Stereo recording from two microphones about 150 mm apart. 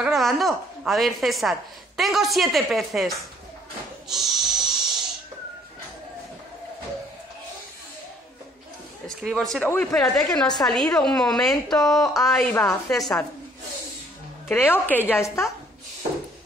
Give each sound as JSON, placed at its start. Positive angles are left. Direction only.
{"t": 0.0, "sound": "a woman's voice", "side_deg": 0}
{"t": 4.1, "sound": "pig", "side_deg": 0}
{"t": 9.2, "sound": "a woman's voice", "side_deg": 0}
{"t": 9.7, "sound": "a woman's voice", "side_deg": 15}
{"t": 9.9, "sound": "a woman's voice", "side_deg": 5}
{"t": 14.5, "sound": "a woman's voice", "side_deg": 10}